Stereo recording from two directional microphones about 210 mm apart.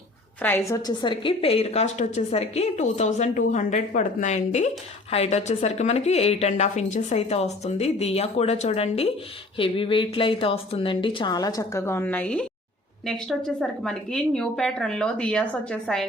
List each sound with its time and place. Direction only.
0.4 s a woman's voice: 10° left (ahead or behind)